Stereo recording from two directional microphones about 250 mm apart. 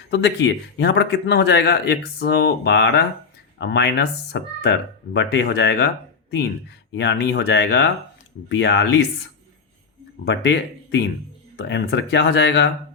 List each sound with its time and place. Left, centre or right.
0.1 s speech: left
6.9 s speech: left
10.2 s speech: left